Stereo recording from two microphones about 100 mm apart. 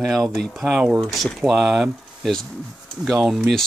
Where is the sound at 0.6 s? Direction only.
10° right (ahead or behind).